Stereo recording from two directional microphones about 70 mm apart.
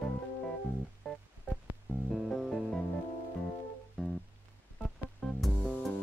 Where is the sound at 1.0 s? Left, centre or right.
Centre.